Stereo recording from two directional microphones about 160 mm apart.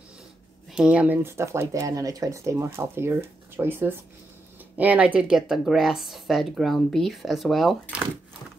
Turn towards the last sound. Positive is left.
turn(degrees=0)  # may be behind; listen again after turning